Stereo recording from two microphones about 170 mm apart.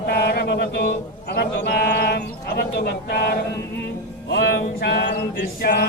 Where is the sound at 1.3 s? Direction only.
70° left (ahead or behind); by 4.6 s 90° left.